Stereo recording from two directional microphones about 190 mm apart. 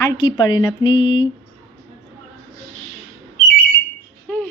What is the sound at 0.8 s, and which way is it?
Mantra, 90° left.